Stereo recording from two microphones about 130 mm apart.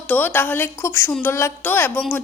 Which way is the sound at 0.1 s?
15° left (ahead or behind).